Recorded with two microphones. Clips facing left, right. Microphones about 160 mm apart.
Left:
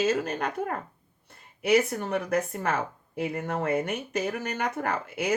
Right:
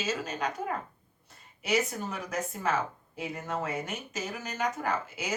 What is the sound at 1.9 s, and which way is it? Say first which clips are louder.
A woman's voice: left 8 dB; 60° left (ahead or behind).